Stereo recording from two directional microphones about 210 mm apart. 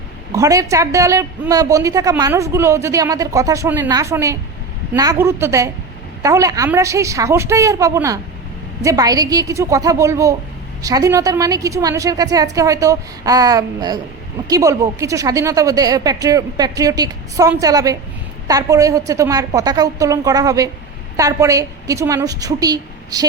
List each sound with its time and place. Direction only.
0.3 s a woman's voice: 15° right (ahead or behind)